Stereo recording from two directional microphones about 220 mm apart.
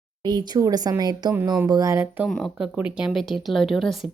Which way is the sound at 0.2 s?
20° right (ahead or behind).